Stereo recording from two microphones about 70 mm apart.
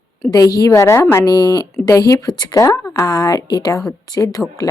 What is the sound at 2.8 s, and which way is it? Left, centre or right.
Speech, left.